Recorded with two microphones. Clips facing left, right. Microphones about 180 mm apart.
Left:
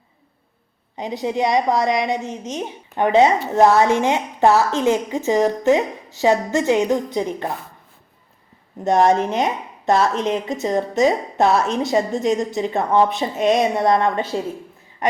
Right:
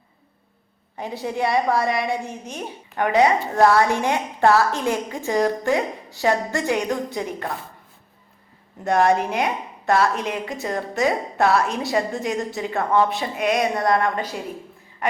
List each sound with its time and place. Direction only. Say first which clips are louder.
0.9 s speech: left 4 dB; 15° left (ahead or behind)
8.8 s speech: left 3 dB; 20° left (ahead or behind)